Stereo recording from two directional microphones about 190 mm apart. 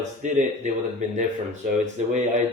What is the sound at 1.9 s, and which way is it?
Speech, 40° right (ahead or behind).